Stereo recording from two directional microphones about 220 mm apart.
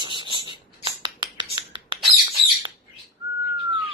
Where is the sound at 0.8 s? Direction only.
20° right (ahead or behind).